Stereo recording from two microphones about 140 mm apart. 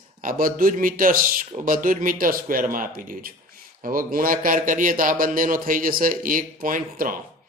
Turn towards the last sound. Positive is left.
turn(degrees=-80)